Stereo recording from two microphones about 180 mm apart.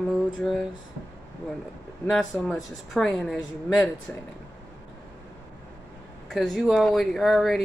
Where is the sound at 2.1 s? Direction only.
Centre (ahead or behind).